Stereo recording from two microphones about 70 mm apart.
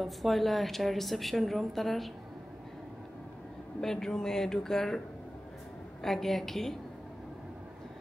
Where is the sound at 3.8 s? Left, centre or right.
Centre.